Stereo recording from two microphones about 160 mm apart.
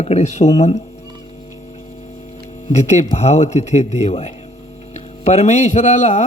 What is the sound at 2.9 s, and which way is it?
Speech, 40° left (ahead or behind).